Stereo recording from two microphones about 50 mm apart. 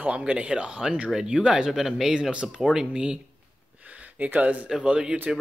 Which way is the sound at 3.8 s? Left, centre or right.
Right.